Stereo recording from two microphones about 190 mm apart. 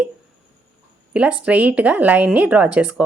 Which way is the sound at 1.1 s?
5° right (ahead or behind).